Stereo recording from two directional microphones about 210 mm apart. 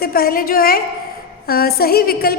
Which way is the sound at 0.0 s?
45° left (ahead or behind).